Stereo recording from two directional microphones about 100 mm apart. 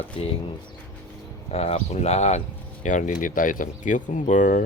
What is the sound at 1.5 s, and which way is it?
Speech, 90° left.